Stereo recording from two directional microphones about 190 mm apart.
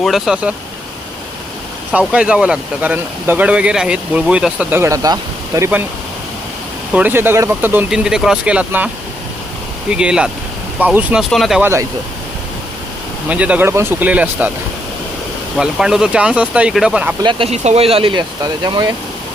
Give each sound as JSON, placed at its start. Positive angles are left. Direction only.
{"t": 0.0, "sound": "speech", "side_deg": 0}
{"t": 1.9, "sound": "speech", "side_deg": -5}
{"t": 6.9, "sound": "speech", "side_deg": -10}
{"t": 9.9, "sound": "speech", "side_deg": -5}
{"t": 11.6, "sound": "speech", "side_deg": -15}
{"t": 13.2, "sound": "speech", "side_deg": -5}
{"t": 15.5, "sound": "speech", "side_deg": -5}
{"t": 17.2, "sound": "speech", "side_deg": -30}